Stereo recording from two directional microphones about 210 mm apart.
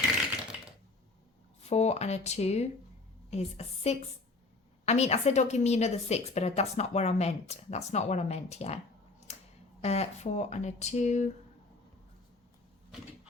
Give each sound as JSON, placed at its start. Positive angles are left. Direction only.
{"t": 1.6, "sound": "a woman's voice", "side_deg": 30}
{"t": 9.8, "sound": "a woman's voice", "side_deg": 30}